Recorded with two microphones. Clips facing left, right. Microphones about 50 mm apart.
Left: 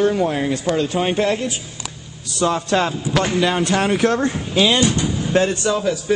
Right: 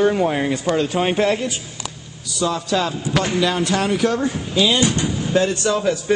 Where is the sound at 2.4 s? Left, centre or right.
Left.